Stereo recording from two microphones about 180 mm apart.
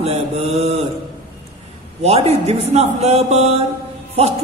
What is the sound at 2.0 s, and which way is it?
A man's voice, 35° right (ahead or behind).